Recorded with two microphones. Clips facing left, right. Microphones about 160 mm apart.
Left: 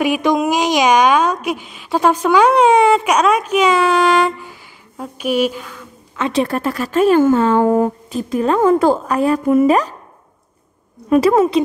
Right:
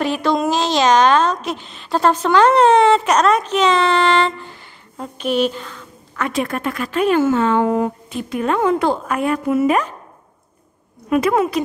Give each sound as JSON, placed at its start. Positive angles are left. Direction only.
{"t": 0.0, "sound": "a woman's voice", "side_deg": 10}
{"t": 6.1, "sound": "a woman's voice", "side_deg": 25}
{"t": 11.1, "sound": "a woman's voice", "side_deg": 35}